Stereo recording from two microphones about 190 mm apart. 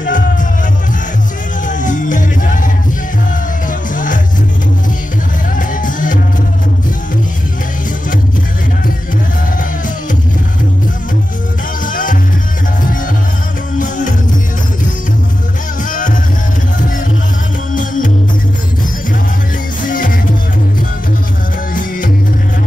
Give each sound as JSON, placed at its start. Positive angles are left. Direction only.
{"t": 0.0, "sound": "music", "side_deg": 45}
{"t": 1.7, "sound": "music", "side_deg": 40}
{"t": 3.9, "sound": "music", "side_deg": 45}
{"t": 5.6, "sound": "music", "side_deg": 45}
{"t": 11.8, "sound": "music", "side_deg": 45}
{"t": 13.7, "sound": "music", "side_deg": 40}
{"t": 15.9, "sound": "music", "side_deg": 45}
{"t": 17.7, "sound": "music", "side_deg": 45}
{"t": 19.9, "sound": "music", "side_deg": 45}